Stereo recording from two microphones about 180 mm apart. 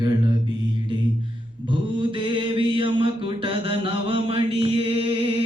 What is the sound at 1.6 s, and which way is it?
Mantra, 25° right (ahead or behind).